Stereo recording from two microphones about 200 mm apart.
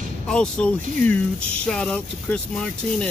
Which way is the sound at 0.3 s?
5° left (ahead or behind).